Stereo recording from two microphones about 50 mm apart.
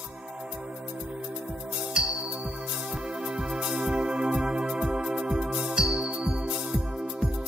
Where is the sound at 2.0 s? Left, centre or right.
Centre.